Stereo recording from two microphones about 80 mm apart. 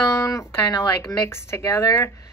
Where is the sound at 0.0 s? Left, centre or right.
Left.